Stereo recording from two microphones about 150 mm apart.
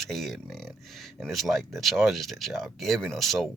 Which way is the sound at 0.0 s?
Centre (ahead or behind).